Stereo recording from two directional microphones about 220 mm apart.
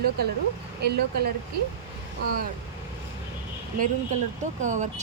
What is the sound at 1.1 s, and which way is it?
Speech, 45° right (ahead or behind).